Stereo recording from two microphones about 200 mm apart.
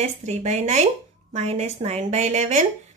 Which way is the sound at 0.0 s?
35° right (ahead or behind).